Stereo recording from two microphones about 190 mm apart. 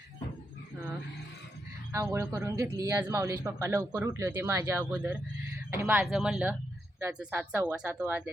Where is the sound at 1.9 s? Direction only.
15° right (ahead or behind).